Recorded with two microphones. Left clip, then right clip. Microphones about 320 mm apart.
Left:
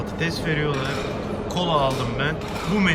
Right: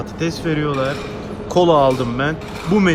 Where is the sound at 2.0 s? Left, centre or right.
Centre.